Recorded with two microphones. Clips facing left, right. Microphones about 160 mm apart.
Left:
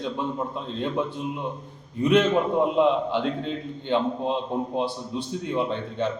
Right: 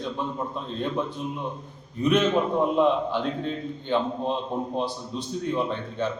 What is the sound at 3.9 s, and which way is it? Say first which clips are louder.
A man's voice: left 2 dB; 15° left (ahead or behind).